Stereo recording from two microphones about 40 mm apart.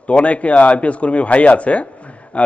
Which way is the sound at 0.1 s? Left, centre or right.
Left.